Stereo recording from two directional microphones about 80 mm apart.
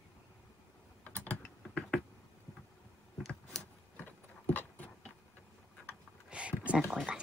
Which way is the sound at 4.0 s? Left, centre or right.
Left.